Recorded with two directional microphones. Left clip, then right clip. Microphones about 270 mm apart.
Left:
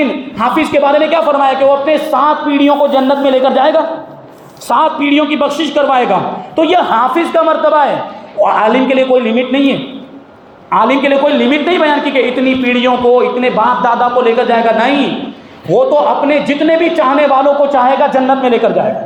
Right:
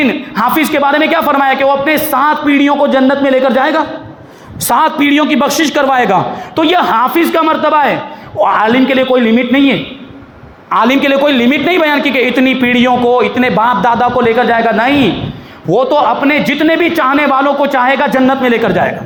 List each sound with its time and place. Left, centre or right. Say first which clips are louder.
0.5 s a man's voice: left 2 dB; right